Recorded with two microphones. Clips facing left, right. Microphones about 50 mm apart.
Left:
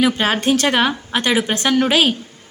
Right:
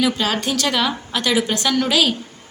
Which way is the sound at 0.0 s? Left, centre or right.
Left.